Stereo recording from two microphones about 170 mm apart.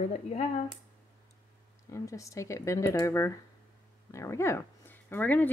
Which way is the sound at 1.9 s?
20° left (ahead or behind).